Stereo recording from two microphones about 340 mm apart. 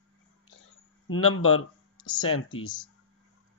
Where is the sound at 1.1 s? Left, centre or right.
Left.